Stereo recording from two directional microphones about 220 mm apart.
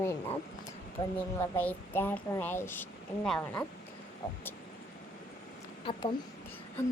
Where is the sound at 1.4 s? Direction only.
10° left (ahead or behind).